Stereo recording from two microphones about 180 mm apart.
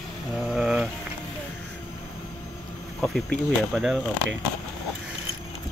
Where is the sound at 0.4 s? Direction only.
5° right (ahead or behind).